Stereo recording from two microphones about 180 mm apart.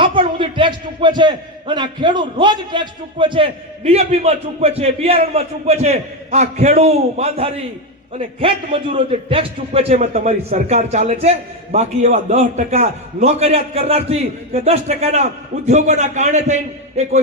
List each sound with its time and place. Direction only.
0.0 s speech: 30° right (ahead or behind)